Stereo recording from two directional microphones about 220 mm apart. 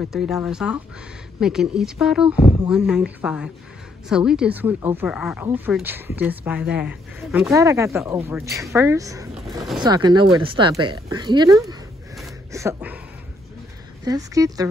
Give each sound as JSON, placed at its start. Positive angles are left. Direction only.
{"t": 0.1, "sound": "speech", "side_deg": 0}
{"t": 7.4, "sound": "speech", "side_deg": -15}
{"t": 12.5, "sound": "a sound", "side_deg": -10}
{"t": 14.0, "sound": "speech", "side_deg": -15}